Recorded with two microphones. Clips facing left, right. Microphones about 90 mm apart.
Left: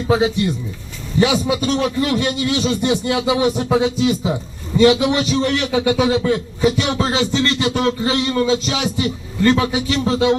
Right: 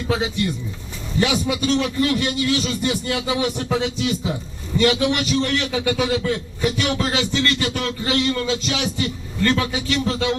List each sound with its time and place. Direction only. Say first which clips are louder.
0.1 s a man's voice: left 6 dB; 25° left (ahead or behind)